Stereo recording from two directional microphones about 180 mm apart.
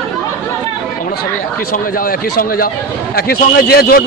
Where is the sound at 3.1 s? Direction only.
55° left (ahead or behind).